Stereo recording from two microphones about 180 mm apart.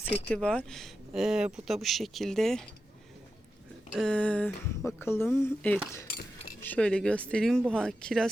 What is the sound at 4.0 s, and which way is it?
Speech, 5° left (ahead or behind).